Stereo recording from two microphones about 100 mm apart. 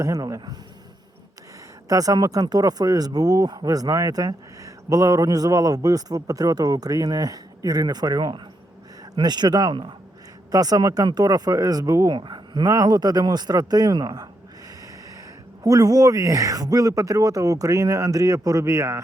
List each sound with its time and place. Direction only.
0.0 s speech: 35° right (ahead or behind)
1.9 s speech: 35° right (ahead or behind)
12.1 s speech: 50° right (ahead or behind)
15.6 s speech: 40° right (ahead or behind)